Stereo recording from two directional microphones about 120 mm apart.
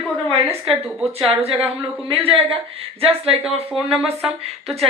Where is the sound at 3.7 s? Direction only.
5° right (ahead or behind).